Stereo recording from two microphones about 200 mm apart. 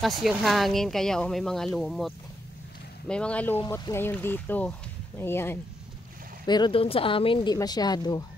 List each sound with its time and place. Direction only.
0.0 s speech: centre (ahead or behind)
6.4 s speech: 20° left (ahead or behind)